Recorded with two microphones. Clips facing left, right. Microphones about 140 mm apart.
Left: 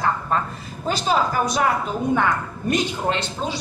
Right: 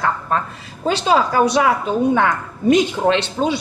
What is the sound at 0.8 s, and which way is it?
A woman's voice, 80° right.